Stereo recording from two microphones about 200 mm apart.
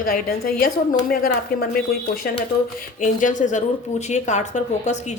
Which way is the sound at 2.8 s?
40° left (ahead or behind).